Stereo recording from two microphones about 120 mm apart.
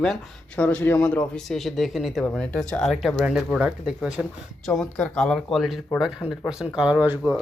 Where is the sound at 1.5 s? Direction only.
Centre (ahead or behind).